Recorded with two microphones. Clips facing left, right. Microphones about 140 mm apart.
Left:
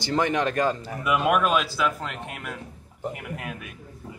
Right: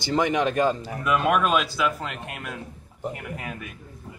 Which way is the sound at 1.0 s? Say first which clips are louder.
Even; 5° left (ahead or behind).